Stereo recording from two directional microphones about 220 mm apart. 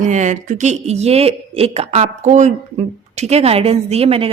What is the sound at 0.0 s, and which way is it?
Speech, 35° right (ahead or behind).